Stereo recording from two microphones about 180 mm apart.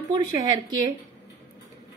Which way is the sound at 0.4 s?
20° right (ahead or behind).